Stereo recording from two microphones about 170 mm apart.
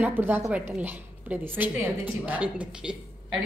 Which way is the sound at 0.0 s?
10° right (ahead or behind).